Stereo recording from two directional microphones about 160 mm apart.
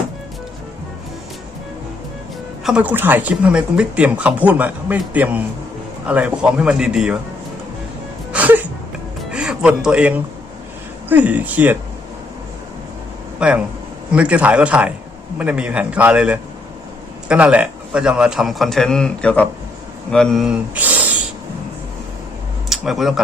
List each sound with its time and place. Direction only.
2.6 s speech: 10° right (ahead or behind)
8.3 s music: 10° right (ahead or behind)
9.3 s speech: 5° right (ahead or behind)
13.4 s a man's voice: 5° right (ahead or behind)
22.7 s speech: centre (ahead or behind)